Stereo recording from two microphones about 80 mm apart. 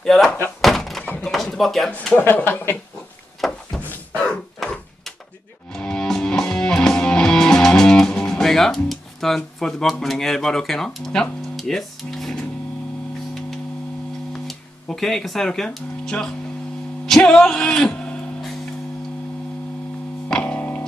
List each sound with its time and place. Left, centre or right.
0.0 s door: centre
0.6 s thunk: centre
1.0 s a sound: centre
1.3 s a sound: centre
2.1 s speech: left
3.3 s a sound: centre
5.8 s music: centre
14.9 s speech: centre
20.2 s music: centre